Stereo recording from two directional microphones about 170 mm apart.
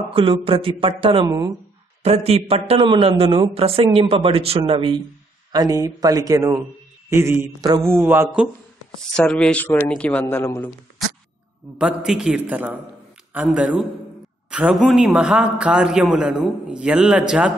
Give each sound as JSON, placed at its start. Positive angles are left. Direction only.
{"t": 0.1, "sound": "a man's voice", "side_deg": -35}
{"t": 1.2, "sound": "speech", "side_deg": -20}
{"t": 2.0, "sound": "a man's voice", "side_deg": -35}
{"t": 5.5, "sound": "a man's voice", "side_deg": -20}
{"t": 9.1, "sound": "speech", "side_deg": 5}
{"t": 11.8, "sound": "a man's voice", "side_deg": -5}